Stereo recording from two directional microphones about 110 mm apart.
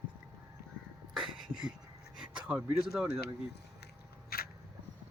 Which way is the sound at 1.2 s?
Centre (ahead or behind).